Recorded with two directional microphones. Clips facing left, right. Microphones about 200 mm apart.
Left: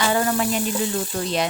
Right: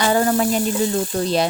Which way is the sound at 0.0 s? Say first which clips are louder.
Right 4 dB; 35° right (ahead or behind).